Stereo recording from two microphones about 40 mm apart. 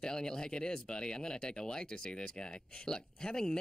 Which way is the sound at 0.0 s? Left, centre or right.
Centre.